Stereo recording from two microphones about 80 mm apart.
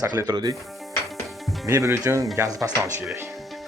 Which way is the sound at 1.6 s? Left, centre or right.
Right.